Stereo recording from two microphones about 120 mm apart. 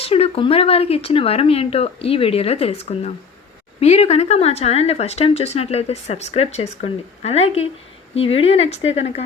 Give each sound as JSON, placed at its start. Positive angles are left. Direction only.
{"t": 0.0, "sound": "speech", "side_deg": 55}